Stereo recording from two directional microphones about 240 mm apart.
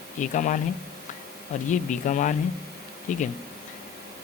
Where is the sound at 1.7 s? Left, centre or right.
Left.